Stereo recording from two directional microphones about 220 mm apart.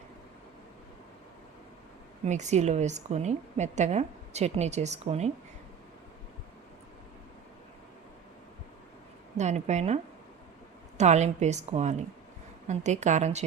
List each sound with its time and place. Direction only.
2.2 s a woman's voice: 30° right (ahead or behind)
9.4 s a woman's voice: 30° right (ahead or behind)